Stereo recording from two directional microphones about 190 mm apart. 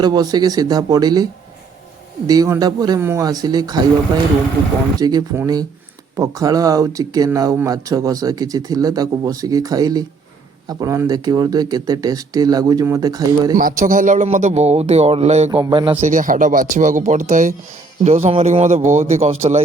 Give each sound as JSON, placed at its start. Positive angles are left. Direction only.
{"t": 0.0, "sound": "speech", "side_deg": -20}
{"t": 4.9, "sound": "speech", "side_deg": -20}
{"t": 13.6, "sound": "speech", "side_deg": -45}
{"t": 16.0, "sound": "speech", "side_deg": -40}